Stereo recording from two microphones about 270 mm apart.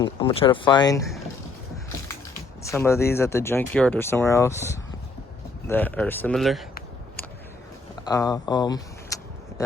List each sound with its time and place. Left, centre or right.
0.0 s speech: centre
2.6 s speech: centre
8.0 s speech: centre